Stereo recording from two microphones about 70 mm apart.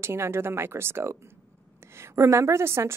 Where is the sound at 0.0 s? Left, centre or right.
Right.